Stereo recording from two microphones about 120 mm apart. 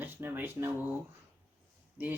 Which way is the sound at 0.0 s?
15° right (ahead or behind).